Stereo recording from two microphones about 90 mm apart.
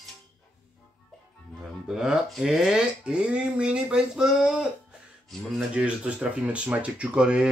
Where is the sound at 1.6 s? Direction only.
5° right (ahead or behind).